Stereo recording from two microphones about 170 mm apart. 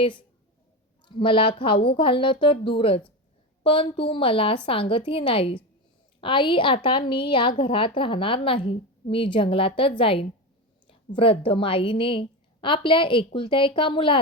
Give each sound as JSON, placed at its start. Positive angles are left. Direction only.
{"t": 0.0, "sound": "a woman's voice", "side_deg": 30}